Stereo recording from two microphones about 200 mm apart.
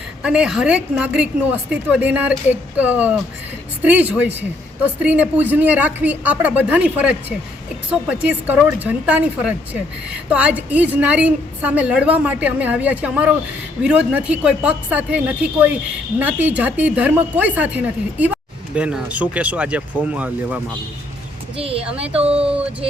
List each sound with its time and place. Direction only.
0.2 s a woman's voice: 5° right (ahead or behind)
21.6 s speech: 30° right (ahead or behind)